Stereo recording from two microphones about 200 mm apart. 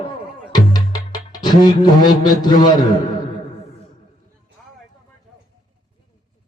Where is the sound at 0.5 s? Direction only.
20° left (ahead or behind).